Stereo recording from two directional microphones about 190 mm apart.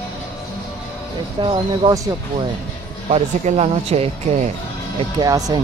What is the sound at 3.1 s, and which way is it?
Speech, 35° right (ahead or behind).